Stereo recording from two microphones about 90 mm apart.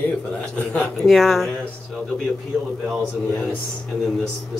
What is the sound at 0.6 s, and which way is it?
Speech, 15° left (ahead or behind).